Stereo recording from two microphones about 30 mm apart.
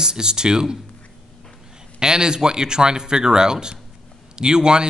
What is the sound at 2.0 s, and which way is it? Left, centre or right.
Speech, right.